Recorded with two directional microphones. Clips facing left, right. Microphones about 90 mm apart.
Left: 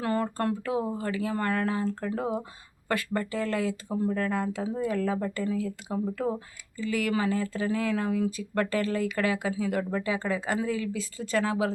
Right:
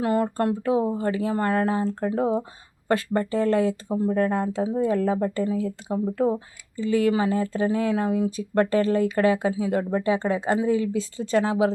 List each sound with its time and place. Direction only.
0.0 s speech: 20° right (ahead or behind)